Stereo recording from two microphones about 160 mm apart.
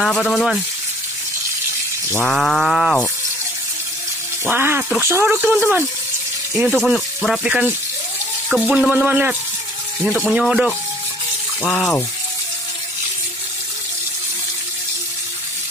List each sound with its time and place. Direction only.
0.0 s cattle: 5° left (ahead or behind)
2.2 s cattle: centre (ahead or behind)
4.5 s speech: 15° right (ahead or behind)
6.7 s cattle: 5° left (ahead or behind)
8.5 s speech: 5° right (ahead or behind)
10.0 s cattle: centre (ahead or behind)
11.6 s speech: 10° left (ahead or behind)